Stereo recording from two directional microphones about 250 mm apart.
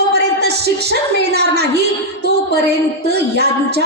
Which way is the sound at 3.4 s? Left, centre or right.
Right.